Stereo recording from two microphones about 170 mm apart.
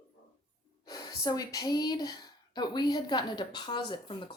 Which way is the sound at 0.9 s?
25° left (ahead or behind).